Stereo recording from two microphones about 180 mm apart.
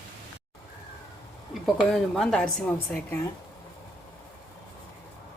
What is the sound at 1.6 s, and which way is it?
A woman's voice, centre (ahead or behind).